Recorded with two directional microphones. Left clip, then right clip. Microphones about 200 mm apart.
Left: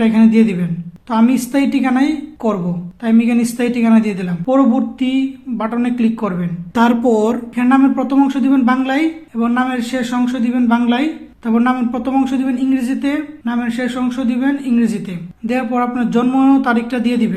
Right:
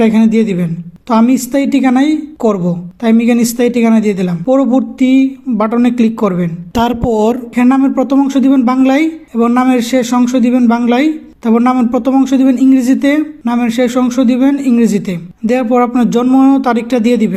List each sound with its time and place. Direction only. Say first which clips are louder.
0.0 s a woman's voice: right 3 dB; 30° right (ahead or behind)